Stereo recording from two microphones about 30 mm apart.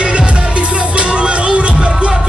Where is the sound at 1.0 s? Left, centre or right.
Right.